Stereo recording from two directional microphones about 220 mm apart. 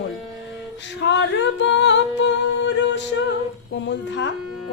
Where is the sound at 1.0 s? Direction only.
55° left (ahead or behind).